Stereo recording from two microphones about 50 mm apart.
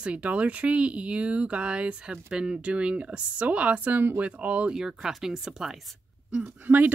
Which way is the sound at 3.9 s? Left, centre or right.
Right.